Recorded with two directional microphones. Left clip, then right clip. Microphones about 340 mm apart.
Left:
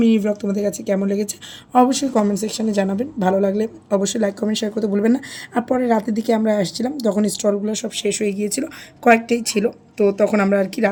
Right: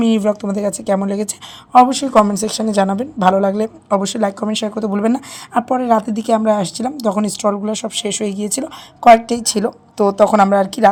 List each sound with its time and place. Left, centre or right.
0.0 s a woman's voice: centre
10.3 s speech: right